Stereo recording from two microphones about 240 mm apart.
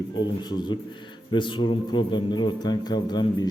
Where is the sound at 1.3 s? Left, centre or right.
Centre.